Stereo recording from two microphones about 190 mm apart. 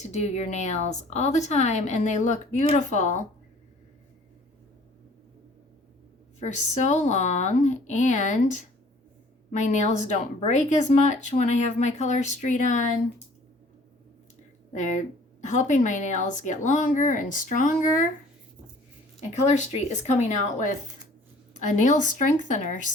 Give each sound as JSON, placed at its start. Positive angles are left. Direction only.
{"t": 0.0, "sound": "speech", "side_deg": 35}
{"t": 6.4, "sound": "speech", "side_deg": 40}
{"t": 14.7, "sound": "speech", "side_deg": 40}
{"t": 19.3, "sound": "speech", "side_deg": 40}
{"t": 21.8, "sound": "speech", "side_deg": 40}